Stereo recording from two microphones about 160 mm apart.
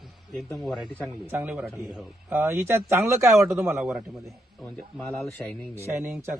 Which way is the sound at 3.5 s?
Centre (ahead or behind).